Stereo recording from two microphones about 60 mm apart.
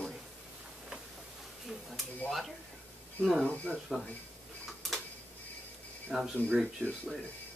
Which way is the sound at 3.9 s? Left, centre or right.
Centre.